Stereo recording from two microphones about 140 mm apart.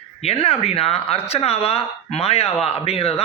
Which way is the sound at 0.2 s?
45° left (ahead or behind).